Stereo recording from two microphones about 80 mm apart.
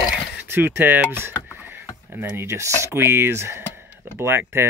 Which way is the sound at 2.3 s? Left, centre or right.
Right.